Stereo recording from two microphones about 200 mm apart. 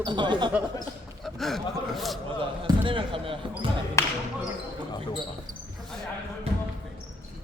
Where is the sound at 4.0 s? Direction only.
15° left (ahead or behind).